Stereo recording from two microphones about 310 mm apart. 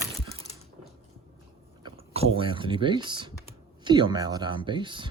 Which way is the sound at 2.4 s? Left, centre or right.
Centre.